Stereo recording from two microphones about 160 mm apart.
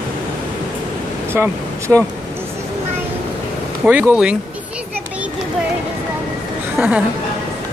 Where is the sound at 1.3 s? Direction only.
15° right (ahead or behind).